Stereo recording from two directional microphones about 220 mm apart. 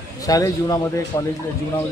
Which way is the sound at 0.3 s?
15° left (ahead or behind).